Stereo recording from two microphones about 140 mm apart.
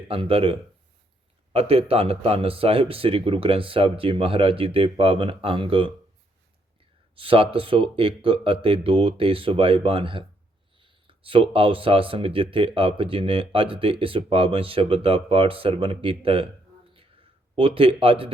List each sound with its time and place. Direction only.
0.1 s a man's voice: 40° right (ahead or behind)
1.5 s a man's voice: 45° right (ahead or behind)
7.2 s a man's voice: 40° right (ahead or behind)
17.5 s a man's voice: 40° right (ahead or behind)